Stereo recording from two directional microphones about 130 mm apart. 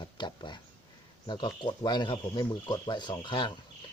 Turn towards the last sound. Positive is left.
turn(degrees=35)  # may be behind; listen again after turning